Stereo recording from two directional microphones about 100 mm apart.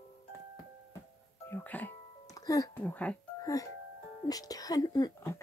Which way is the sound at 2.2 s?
35° left (ahead or behind).